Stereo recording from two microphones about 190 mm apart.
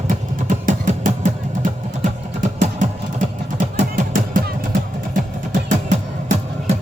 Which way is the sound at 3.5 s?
45° right (ahead or behind).